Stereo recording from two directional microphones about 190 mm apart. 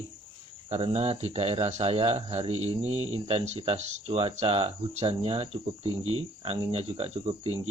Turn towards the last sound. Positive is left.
turn(degrees=-35)  # may be behind; listen again after turning